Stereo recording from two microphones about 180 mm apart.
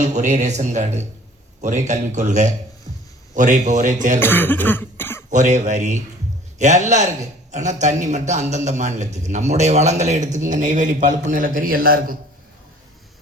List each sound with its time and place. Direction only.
0.0 s a man's voice: 40° right (ahead or behind)
4.2 s cough: 10° left (ahead or behind)
5.3 s a man's voice: 45° right (ahead or behind)